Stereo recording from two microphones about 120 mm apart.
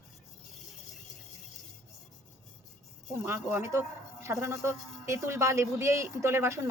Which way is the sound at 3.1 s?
20° right (ahead or behind).